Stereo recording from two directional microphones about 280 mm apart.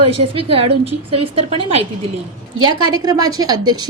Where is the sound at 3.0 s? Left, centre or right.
Centre.